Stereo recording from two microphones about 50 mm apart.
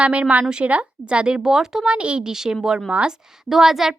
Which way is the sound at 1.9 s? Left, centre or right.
Right.